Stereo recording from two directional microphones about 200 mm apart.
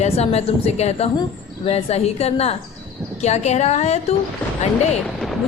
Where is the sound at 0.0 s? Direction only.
30° left (ahead or behind).